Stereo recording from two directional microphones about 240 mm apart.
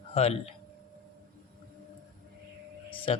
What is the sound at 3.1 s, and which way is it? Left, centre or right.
Speech, left.